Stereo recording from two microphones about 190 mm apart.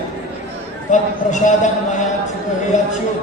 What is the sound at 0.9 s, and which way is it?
A man's voice, 40° left (ahead or behind).